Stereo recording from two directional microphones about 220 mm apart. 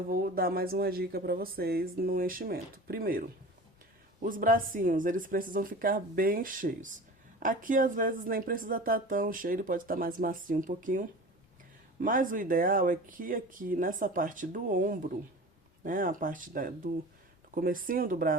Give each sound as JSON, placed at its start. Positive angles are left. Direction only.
{"t": 0.1, "sound": "speech", "side_deg": -40}